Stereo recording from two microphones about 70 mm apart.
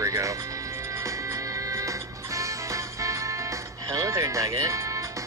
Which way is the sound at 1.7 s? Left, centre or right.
Right.